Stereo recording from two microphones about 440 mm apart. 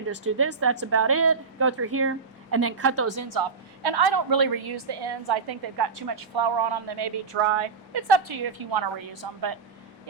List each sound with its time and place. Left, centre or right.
0.1 s a woman's voice: right
3.8 s a woman's voice: right